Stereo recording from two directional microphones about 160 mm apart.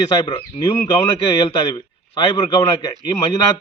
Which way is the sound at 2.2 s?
25° left (ahead or behind).